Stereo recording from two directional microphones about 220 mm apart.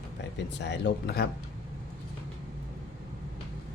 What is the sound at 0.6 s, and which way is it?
Speech, 50° left (ahead or behind).